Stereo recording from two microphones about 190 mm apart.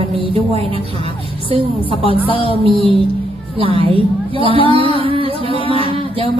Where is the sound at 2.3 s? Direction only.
30° left (ahead or behind).